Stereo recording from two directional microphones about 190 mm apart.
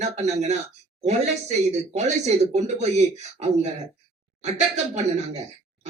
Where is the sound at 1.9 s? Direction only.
35° right (ahead or behind).